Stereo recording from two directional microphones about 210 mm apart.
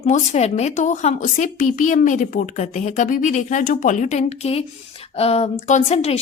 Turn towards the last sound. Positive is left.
turn(degrees=30)  # may be behind; listen again after turning